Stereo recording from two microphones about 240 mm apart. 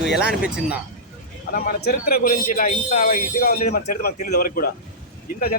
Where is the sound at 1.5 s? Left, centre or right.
Left.